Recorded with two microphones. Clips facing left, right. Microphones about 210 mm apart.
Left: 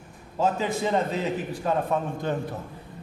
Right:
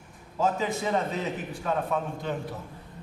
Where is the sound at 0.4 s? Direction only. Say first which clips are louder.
Left 2 dB; 30° left (ahead or behind).